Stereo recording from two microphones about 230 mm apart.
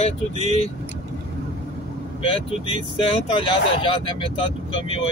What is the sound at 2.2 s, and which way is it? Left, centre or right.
Speech, left.